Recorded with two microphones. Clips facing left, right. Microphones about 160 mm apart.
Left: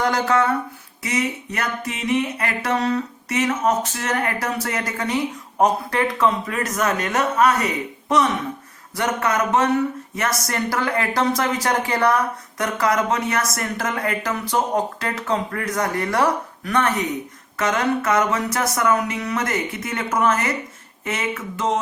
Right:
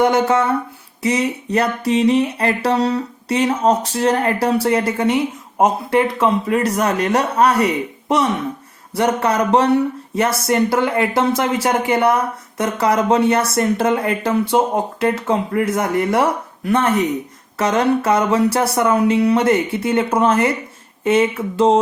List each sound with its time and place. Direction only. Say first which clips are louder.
0.0 s speech: right 4 dB; 25° right (ahead or behind)
1.0 s a sound: right 6 dB; 30° right (ahead or behind)
10.4 s speech: right 7 dB; 25° right (ahead or behind)